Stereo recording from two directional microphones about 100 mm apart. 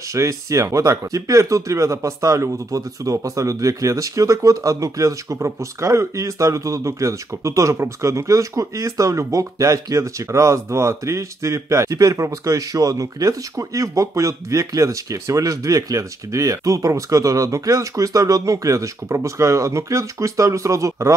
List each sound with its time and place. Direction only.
0.1 s speech: 30° right (ahead or behind)